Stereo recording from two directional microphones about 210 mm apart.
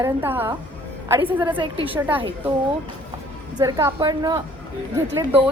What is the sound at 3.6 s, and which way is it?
Speech, 15° right (ahead or behind).